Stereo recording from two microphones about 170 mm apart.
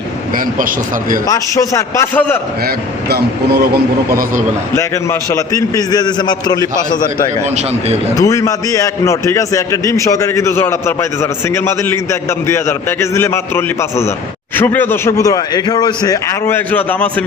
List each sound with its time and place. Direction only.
1.3 s a man's voice: 20° left (ahead or behind)
3.1 s speech: 70° right (ahead or behind)
5.3 s a man's voice: 20° left (ahead or behind)
8.1 s a man's voice: 20° left (ahead or behind)